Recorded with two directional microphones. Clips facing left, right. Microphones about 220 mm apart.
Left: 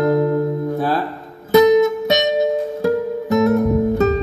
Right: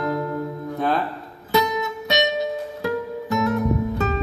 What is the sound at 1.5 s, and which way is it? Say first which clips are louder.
Music: left 11 dB; 45° left (ahead or behind).